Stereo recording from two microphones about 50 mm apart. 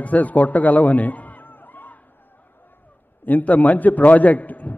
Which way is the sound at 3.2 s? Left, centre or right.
Left.